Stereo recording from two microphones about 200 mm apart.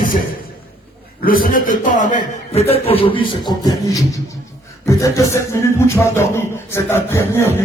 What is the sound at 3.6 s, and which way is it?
Speech, 15° left (ahead or behind).